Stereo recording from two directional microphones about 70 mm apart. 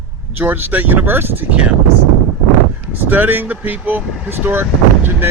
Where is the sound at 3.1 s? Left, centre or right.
Right.